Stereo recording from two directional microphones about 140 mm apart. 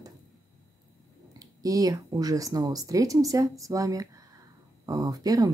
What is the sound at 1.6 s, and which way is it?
Speech, 25° right (ahead or behind).